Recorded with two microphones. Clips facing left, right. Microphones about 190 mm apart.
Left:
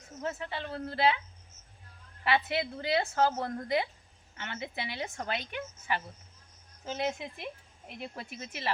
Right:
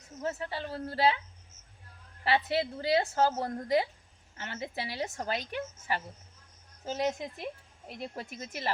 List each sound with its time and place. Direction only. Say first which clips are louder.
0.2 s a woman's voice: right 1 dB; 40° right (ahead or behind)
2.2 s a woman's voice: right 1 dB; 35° right (ahead or behind)